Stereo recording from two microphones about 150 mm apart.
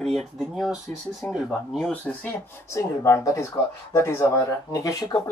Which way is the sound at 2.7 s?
20° left (ahead or behind).